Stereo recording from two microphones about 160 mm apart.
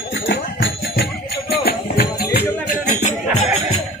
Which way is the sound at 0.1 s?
90° left.